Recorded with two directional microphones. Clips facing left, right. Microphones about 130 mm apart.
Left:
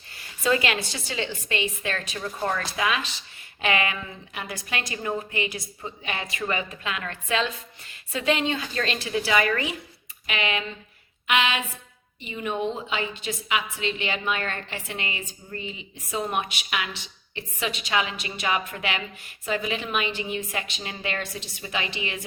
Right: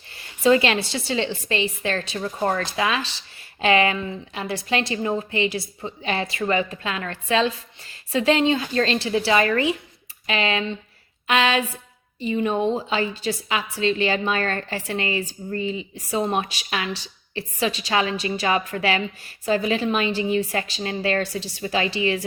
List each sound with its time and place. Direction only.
0.1 s a woman's voice: 25° right (ahead or behind)